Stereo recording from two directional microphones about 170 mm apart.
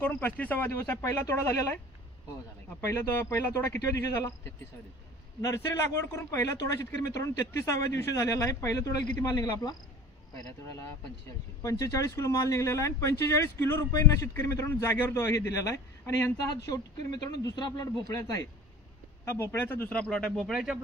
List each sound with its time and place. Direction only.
0.0 s speech: 10° left (ahead or behind)
2.9 s speech: 15° left (ahead or behind)
6.1 s speech: 15° left (ahead or behind)
11.6 s speech: 20° left (ahead or behind); by 20.8 s 5° right (ahead or behind)